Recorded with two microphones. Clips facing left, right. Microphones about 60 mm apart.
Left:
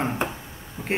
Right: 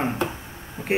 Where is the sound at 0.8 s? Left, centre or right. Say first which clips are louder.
Right 3 dB; right.